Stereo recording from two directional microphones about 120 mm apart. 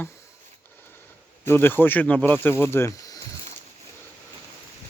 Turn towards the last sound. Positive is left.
turn(degrees=25)  # may be behind; listen again after turning